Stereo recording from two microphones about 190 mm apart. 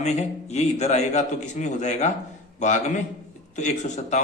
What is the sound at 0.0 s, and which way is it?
Speech, 35° left (ahead or behind).